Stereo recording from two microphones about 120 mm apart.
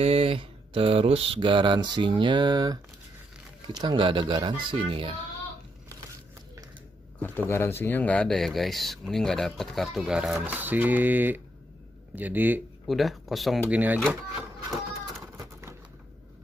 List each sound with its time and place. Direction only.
0.0 s speech: 55° right (ahead or behind)
7.2 s speech: 15° left (ahead or behind); by 10.4 s 5° right (ahead or behind)
10.4 s speech: 15° right (ahead or behind)
12.8 s speech: centre (ahead or behind)
13.7 s speech: 10° right (ahead or behind)
14.7 s a sound: centre (ahead or behind)